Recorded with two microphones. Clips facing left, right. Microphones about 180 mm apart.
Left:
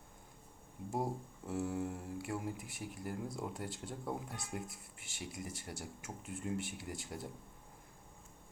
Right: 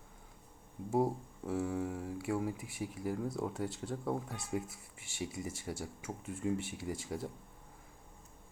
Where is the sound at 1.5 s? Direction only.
5° left (ahead or behind).